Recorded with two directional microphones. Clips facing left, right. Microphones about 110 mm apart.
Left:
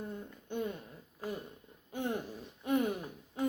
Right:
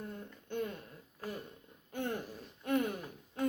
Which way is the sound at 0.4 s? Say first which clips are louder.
Left 1 dB; 15° left (ahead or behind).